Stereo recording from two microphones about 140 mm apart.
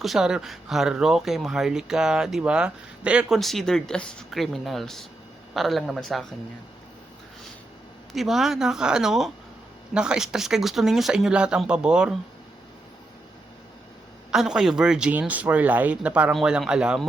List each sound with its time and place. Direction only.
0.0 s speech: centre (ahead or behind)
8.1 s speech: centre (ahead or behind)
14.3 s speech: 5° right (ahead or behind)